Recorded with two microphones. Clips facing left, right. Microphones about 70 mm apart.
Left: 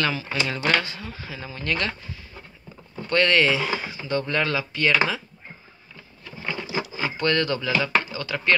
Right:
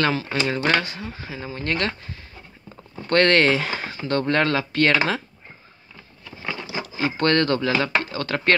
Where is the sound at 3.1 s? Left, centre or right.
Right.